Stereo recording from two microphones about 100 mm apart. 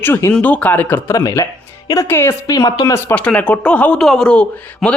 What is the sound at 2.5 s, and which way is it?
Speech, 35° left (ahead or behind).